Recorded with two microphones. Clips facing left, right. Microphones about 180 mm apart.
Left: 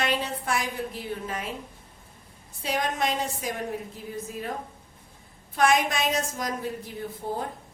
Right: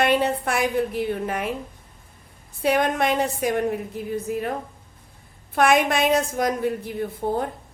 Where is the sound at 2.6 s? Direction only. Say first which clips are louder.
Right 7 dB; 60° right (ahead or behind).